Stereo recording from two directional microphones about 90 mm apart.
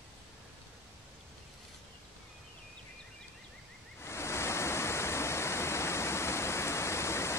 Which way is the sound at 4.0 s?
30° left (ahead or behind).